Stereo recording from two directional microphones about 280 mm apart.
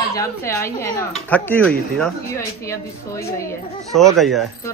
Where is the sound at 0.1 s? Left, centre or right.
Centre.